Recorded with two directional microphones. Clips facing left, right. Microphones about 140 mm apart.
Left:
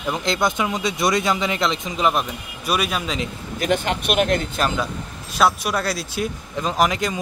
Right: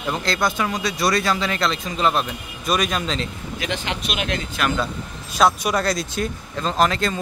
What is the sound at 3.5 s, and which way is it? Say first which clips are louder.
Speech: left 6 dB; 50° left (ahead or behind).